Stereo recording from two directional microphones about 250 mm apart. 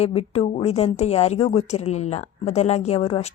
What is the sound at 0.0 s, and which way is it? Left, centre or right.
Speech, left.